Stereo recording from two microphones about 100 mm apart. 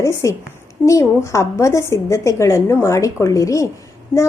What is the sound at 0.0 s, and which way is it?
A woman's voice, 30° left (ahead or behind).